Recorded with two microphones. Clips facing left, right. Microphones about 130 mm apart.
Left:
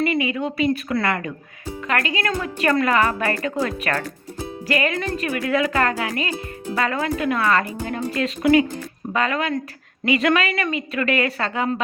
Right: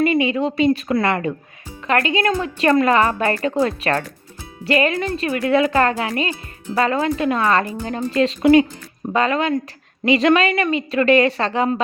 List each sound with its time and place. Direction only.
0.0 s a woman's voice: 25° right (ahead or behind)